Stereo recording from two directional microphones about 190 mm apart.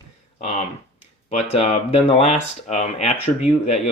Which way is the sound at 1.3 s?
35° left (ahead or behind).